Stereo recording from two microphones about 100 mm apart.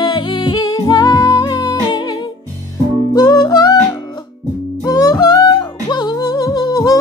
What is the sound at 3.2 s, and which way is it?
Music, 45° left (ahead or behind).